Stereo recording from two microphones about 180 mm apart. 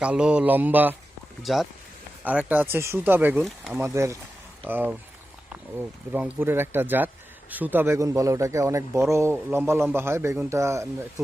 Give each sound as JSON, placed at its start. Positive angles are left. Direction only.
{"t": 0.0, "sound": "speech", "side_deg": -5}
{"t": 3.8, "sound": "speech", "side_deg": -15}